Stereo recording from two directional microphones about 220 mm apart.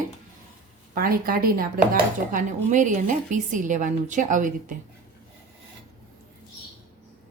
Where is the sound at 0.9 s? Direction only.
40° right (ahead or behind).